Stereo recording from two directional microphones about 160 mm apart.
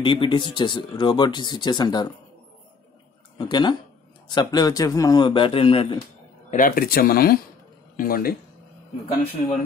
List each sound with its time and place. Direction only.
0.0 s speech: 30° left (ahead or behind)
3.3 s speech: 30° left (ahead or behind)
6.5 s speech: 60° left (ahead or behind)